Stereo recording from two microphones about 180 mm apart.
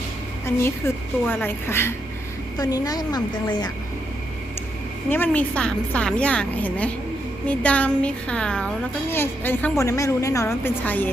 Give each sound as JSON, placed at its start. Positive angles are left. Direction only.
{"t": 0.4, "sound": "a woman's voice", "side_deg": 15}
{"t": 5.0, "sound": "a woman's voice", "side_deg": 10}